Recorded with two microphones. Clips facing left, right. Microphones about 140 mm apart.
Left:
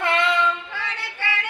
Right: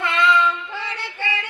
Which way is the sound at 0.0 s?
55° left (ahead or behind).